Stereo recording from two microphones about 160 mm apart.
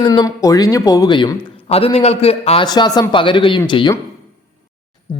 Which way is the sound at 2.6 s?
25° left (ahead or behind).